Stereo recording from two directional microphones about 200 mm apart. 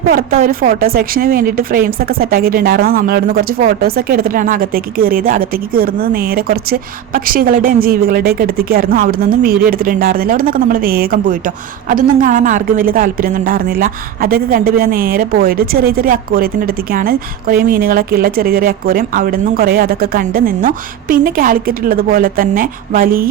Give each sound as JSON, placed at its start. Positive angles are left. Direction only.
{"t": 0.1, "sound": "a woman's voice", "side_deg": -45}